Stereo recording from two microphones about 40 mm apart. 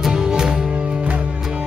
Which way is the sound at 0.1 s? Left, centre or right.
Centre.